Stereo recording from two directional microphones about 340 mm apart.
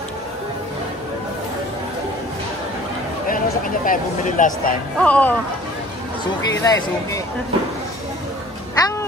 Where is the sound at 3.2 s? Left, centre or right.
Left.